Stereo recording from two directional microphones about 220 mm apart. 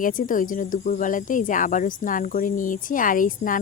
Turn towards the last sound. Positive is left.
turn(degrees=40)  # may be behind; listen again after turning